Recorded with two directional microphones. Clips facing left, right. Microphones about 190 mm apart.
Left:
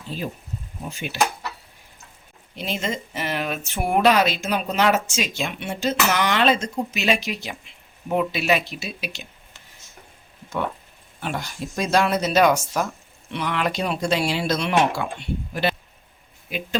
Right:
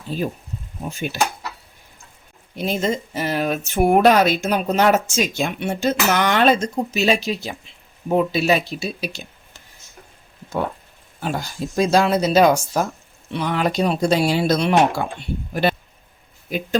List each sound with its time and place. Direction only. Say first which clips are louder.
0.9 s speech: right 5 dB; 45° right (ahead or behind)
2.6 s speech: right 6 dB; 40° right (ahead or behind)
11.2 s speech: right 4 dB; 35° right (ahead or behind)